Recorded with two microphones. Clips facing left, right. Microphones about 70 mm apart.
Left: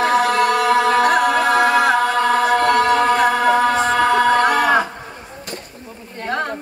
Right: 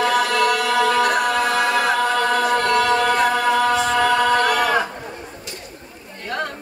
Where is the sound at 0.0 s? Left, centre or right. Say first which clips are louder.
Left 2 dB; left.